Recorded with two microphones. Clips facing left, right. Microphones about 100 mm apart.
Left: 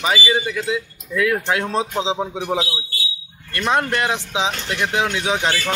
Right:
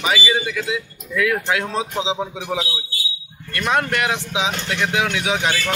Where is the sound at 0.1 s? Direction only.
30° left (ahead or behind).